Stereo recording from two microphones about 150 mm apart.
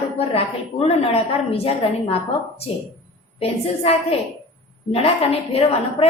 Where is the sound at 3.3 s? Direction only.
40° left (ahead or behind).